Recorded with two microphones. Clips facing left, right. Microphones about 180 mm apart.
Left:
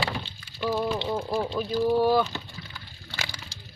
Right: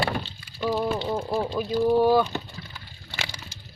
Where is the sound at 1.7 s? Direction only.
15° right (ahead or behind).